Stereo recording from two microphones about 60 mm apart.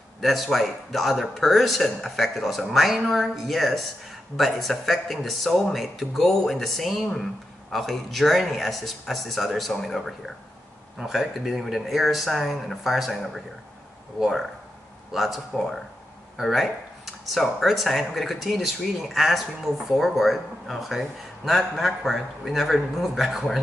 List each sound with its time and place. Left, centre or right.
0.2 s speech: centre
15.1 s speech: centre